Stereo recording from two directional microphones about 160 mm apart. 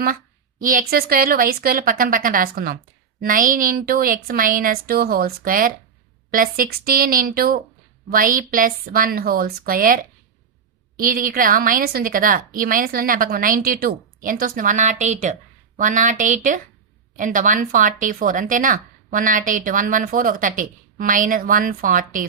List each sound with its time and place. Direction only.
0.6 s a woman's voice: 60° right (ahead or behind)